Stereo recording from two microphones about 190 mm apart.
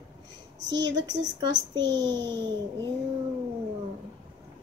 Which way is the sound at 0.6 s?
70° right (ahead or behind).